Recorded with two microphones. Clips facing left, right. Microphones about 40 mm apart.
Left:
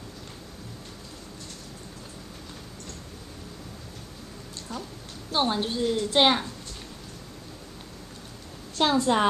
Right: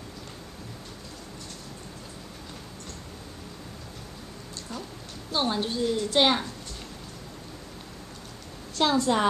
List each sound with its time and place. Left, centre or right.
5.3 s a woman's voice: centre
8.7 s a woman's voice: centre